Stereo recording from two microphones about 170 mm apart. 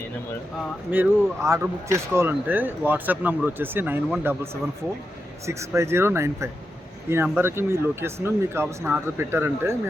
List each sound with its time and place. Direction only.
0.9 s speech: 10° right (ahead or behind)
5.5 s speech: 15° right (ahead or behind)